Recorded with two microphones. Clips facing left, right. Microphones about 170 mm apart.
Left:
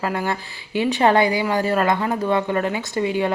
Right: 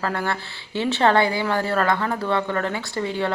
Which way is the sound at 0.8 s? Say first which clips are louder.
Left 2 dB; 15° left (ahead or behind).